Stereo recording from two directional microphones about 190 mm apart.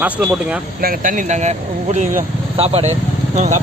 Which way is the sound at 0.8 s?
50° right (ahead or behind).